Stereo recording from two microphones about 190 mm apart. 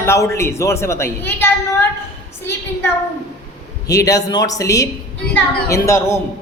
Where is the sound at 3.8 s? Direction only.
15° left (ahead or behind).